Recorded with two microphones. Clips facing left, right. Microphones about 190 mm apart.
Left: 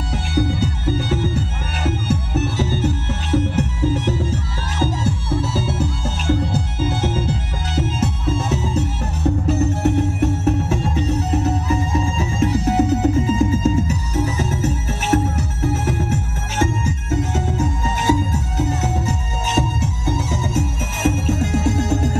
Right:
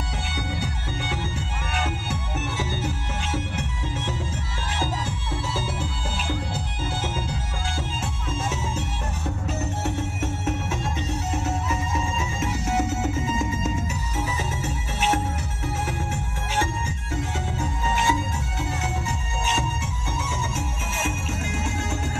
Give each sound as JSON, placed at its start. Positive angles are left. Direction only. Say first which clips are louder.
{"t": 0.3, "sound": "music", "louder": "left 13 dB", "side_deg": 40}